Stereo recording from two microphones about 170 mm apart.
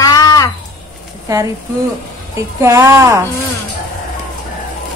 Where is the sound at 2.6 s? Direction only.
20° right (ahead or behind).